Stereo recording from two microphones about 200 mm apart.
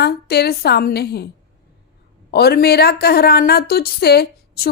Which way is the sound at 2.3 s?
55° left (ahead or behind).